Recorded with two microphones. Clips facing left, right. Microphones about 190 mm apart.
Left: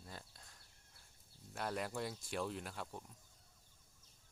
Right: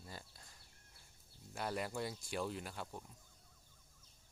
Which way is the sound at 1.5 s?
Centre (ahead or behind).